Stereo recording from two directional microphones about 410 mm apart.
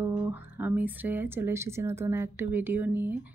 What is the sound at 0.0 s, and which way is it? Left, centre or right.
Speech, centre.